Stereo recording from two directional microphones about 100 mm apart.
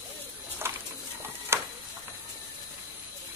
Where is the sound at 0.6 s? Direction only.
25° right (ahead or behind).